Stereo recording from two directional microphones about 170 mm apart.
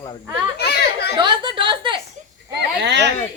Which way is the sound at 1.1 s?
25° right (ahead or behind).